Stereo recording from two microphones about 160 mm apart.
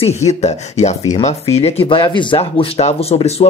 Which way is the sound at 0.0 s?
45° left (ahead or behind).